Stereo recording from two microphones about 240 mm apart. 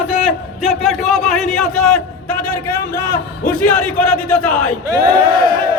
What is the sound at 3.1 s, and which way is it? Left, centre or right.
Speech, left.